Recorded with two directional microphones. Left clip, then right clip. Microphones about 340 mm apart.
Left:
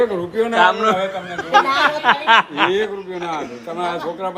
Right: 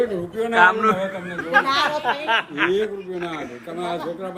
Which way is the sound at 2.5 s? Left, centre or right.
Centre.